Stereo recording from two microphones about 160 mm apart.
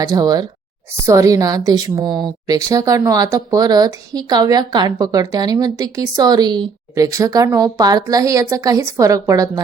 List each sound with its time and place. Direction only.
0.0 s a woman's voice: 25° right (ahead or behind)